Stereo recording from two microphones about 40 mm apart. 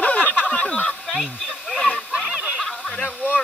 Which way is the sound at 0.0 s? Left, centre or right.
Left.